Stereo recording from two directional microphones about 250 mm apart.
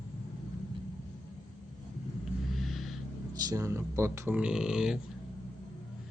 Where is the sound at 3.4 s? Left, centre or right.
Centre.